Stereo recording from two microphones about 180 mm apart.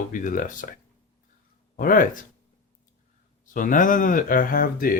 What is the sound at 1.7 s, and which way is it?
Speech, 50° left (ahead or behind).